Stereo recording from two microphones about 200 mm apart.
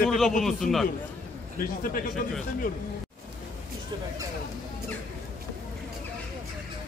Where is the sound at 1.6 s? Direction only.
45° left (ahead or behind).